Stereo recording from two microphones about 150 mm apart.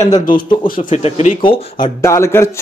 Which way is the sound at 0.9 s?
45° left (ahead or behind).